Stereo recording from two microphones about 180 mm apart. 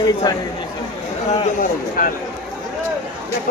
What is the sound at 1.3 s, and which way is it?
Speech, 40° left (ahead or behind).